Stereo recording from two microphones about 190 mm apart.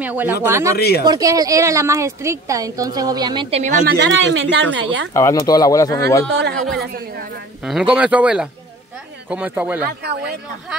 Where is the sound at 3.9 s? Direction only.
70° right (ahead or behind).